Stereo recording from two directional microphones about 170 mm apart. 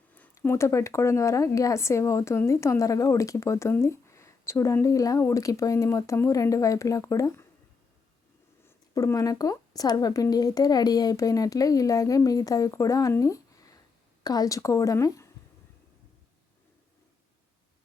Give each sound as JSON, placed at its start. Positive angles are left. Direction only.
{"t": 0.1, "sound": "speech", "side_deg": 10}
{"t": 8.6, "sound": "speech", "side_deg": 15}